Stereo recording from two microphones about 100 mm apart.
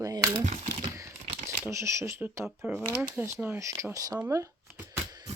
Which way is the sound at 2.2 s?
20° right (ahead or behind).